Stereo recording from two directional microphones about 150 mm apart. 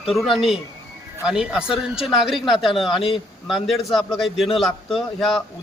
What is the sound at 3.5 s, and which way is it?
A man's voice, centre (ahead or behind).